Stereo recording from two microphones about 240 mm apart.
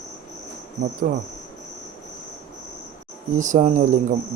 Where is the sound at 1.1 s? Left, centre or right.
Right.